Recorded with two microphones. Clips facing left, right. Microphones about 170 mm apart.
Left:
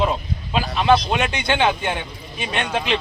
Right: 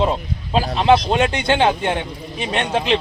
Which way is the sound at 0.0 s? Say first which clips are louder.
Right 2 dB; 30° right (ahead or behind).